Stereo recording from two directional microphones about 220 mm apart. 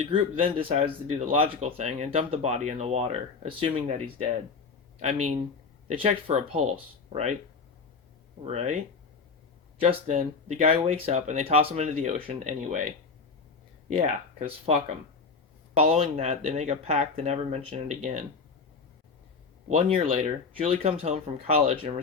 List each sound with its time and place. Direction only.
0.0 s speech: 25° right (ahead or behind)
8.4 s speech: 30° right (ahead or behind)
9.8 s speech: 30° right (ahead or behind)
13.9 s speech: 30° right (ahead or behind)
15.8 s speech: 25° right (ahead or behind)
19.6 s speech: 30° right (ahead or behind)